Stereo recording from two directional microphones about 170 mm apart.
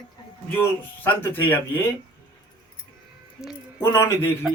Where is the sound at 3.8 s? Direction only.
15° left (ahead or behind).